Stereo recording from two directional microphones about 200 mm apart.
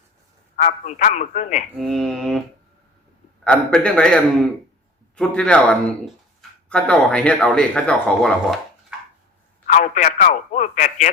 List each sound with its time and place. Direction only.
0.5 s speech: 40° left (ahead or behind)
1.8 s speech: centre (ahead or behind)
3.4 s speech: 5° left (ahead or behind)
9.6 s speech: 40° left (ahead or behind)